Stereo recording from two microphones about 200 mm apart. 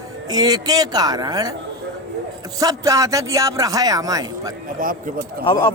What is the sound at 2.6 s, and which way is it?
A man's voice, 15° right (ahead or behind).